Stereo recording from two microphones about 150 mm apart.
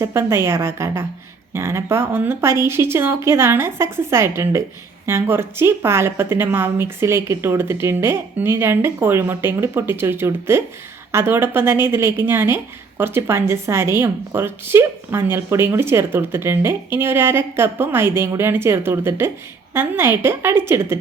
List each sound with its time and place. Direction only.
0.0 s a woman's voice: 15° right (ahead or behind)